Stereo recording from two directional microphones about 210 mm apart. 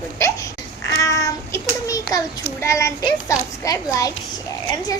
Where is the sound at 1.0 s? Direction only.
15° left (ahead or behind).